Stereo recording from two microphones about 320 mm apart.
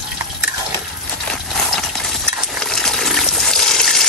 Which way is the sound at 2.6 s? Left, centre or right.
Centre.